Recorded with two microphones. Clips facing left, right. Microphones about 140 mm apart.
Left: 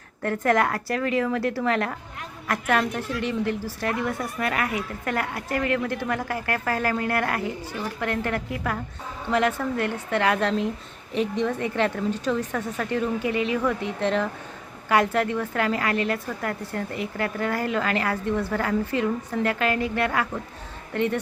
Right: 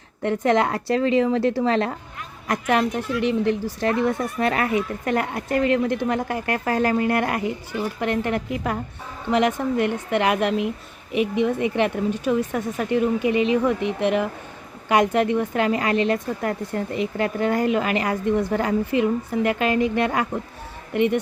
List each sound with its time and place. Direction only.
0.2 s a woman's voice: 20° right (ahead or behind)